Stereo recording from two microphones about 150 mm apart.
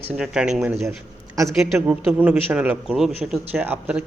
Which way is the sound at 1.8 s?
10° right (ahead or behind).